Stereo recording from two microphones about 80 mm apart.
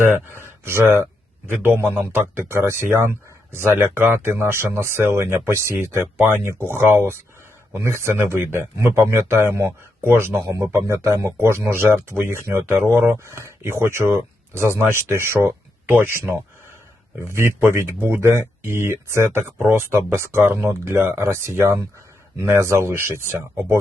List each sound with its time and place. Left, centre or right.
0.1 s speech: right